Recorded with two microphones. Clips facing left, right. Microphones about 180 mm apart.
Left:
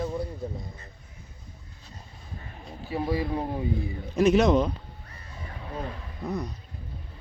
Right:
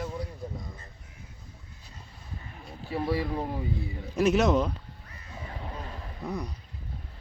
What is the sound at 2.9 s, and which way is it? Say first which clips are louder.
Speech: left 1 dB; 15° left (ahead or behind).